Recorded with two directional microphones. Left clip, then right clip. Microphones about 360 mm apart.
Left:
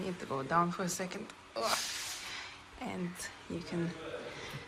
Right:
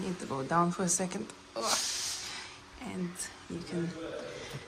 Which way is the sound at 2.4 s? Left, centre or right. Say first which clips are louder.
Even; centre.